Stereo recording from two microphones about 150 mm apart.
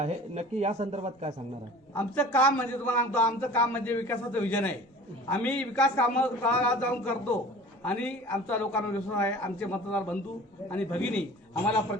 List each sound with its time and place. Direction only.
0.0 s speech: 45° right (ahead or behind)
2.0 s a man's voice: 10° left (ahead or behind)